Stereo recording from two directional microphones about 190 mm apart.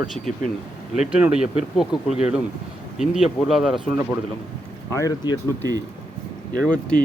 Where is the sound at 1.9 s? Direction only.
35° left (ahead or behind).